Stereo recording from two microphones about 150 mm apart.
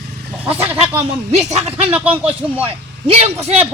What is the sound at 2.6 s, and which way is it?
Speech, 45° right (ahead or behind).